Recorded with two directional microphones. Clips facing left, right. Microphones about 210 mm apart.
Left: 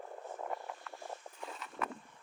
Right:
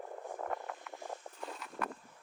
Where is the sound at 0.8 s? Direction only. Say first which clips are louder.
Right 2 dB; 15° right (ahead or behind).